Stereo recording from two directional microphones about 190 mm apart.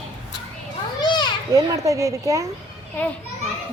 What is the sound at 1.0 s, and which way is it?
Children playing, 25° left (ahead or behind).